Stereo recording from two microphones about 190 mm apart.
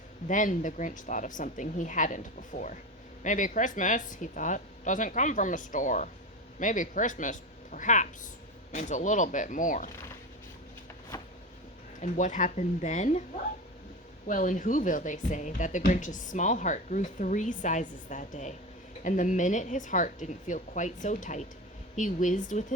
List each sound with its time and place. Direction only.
0.3 s a woman's voice: 40° left (ahead or behind)
11.9 s speech: 40° left (ahead or behind)
14.3 s speech: 40° left (ahead or behind)